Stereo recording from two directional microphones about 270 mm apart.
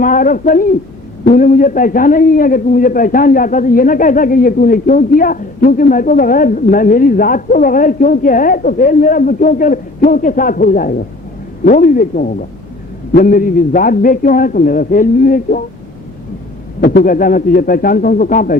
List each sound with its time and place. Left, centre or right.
0.0 s a man's voice: left
16.8 s a man's voice: left